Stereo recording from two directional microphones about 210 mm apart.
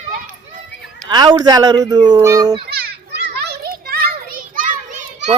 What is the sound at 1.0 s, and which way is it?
Speech, 20° right (ahead or behind).